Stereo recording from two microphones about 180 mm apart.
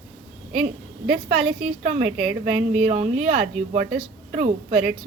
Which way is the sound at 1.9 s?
40° right (ahead or behind).